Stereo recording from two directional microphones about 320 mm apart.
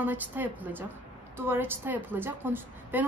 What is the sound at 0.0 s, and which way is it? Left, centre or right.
A woman's voice, centre.